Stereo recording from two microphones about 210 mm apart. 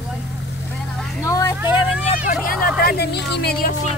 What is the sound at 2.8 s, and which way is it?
Speech, 50° left (ahead or behind).